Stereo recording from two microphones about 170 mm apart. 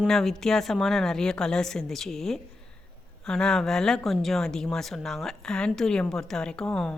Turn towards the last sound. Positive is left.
turn(degrees=5)  # may be behind; listen again after turning